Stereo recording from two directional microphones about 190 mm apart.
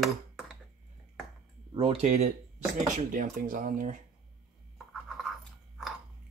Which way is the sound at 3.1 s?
45° right (ahead or behind).